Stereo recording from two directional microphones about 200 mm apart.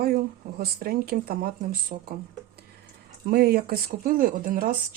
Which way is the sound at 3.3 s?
50° right (ahead or behind).